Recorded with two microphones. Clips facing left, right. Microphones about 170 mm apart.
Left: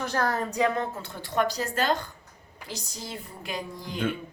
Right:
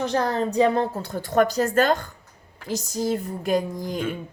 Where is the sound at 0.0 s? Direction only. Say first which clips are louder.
Right 5 dB; 20° right (ahead or behind).